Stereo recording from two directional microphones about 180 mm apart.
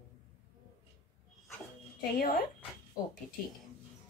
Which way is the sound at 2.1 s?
55° left (ahead or behind).